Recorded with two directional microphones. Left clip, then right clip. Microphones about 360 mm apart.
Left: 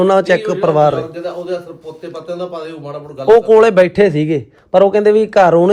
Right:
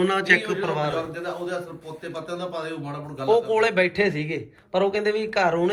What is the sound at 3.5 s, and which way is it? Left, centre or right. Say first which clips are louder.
A man's voice: left 12 dB; centre.